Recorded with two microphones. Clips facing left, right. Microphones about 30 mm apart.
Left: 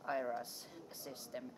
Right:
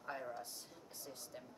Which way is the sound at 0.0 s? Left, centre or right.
Left.